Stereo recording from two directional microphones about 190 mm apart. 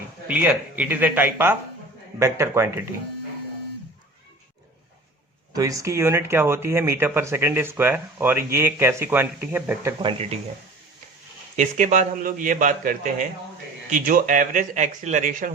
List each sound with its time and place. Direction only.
0.3 s speech: 10° right (ahead or behind)
5.5 s speech: 15° right (ahead or behind)
10.0 s speech: 30° right (ahead or behind)
11.5 s speech: 40° right (ahead or behind)